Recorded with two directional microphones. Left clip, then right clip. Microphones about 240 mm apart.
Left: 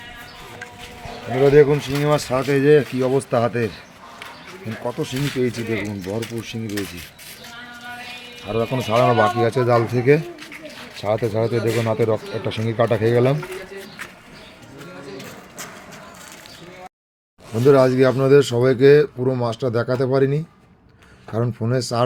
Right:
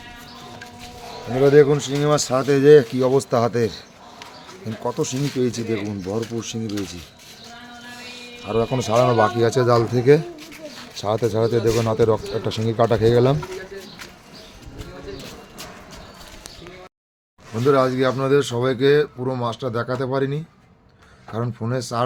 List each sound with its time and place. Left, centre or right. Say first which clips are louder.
1.5 s speech: even; centre
4.8 s speech: right 1 dB; centre
8.4 s speech: right 1 dB; centre
17.5 s speech: left 3 dB; centre